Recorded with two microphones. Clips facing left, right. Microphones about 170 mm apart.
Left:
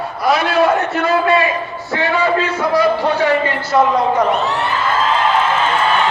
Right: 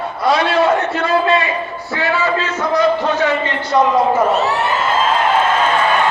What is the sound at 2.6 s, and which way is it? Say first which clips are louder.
A man's voice: right 1 dB; 10° left (ahead or behind).